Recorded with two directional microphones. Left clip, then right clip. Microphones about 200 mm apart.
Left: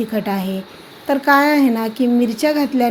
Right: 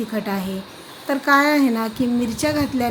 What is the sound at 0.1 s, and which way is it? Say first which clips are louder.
Speech: left 4 dB; 15° left (ahead or behind).